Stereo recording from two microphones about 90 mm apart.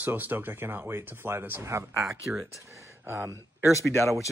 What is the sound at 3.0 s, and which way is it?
Speech, 30° right (ahead or behind).